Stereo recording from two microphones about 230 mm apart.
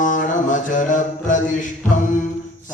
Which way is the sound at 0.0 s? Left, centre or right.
Left.